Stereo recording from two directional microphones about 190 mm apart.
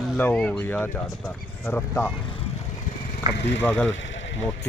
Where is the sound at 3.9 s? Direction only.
80° left.